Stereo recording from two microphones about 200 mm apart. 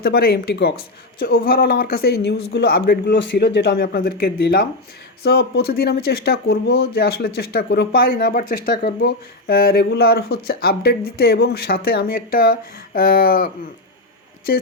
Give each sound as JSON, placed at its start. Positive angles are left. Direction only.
{"t": 0.0, "sound": "speech", "side_deg": 50}